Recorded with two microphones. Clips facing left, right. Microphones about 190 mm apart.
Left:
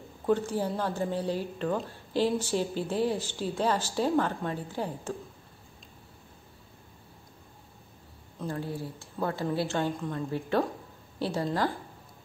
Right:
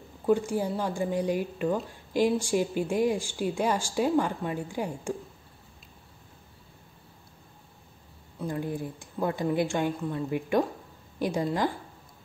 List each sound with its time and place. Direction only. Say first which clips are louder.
0.3 s a woman's voice: right 2 dB; 10° right (ahead or behind)
8.4 s a woman's voice: right 2 dB; 15° right (ahead or behind)